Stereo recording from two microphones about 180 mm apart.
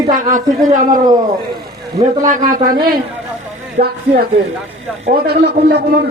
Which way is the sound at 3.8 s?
45° right (ahead or behind).